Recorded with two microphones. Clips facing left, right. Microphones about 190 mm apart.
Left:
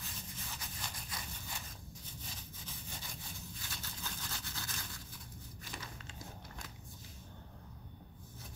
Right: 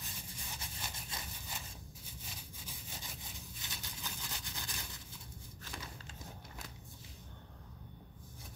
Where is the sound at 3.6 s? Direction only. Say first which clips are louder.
Left 1 dB; 15° right (ahead or behind).